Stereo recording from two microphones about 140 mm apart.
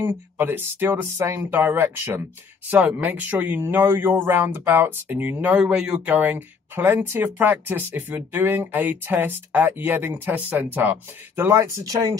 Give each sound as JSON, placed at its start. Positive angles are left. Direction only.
{"t": 0.0, "sound": "speech", "side_deg": -15}